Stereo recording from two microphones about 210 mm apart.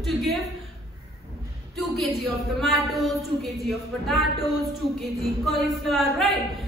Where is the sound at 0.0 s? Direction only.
Centre (ahead or behind).